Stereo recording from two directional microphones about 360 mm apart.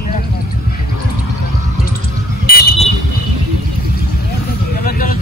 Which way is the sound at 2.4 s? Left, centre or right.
Left.